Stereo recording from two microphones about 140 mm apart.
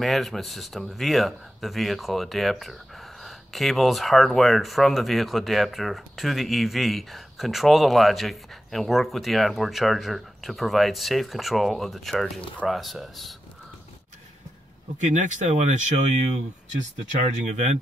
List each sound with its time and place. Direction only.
0.0 s speech: centre (ahead or behind)
15.1 s speech: 55° right (ahead or behind)
17.2 s speech: 60° right (ahead or behind)